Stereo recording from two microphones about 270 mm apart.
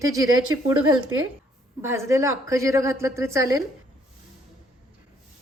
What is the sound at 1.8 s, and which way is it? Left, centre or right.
A woman's voice, centre.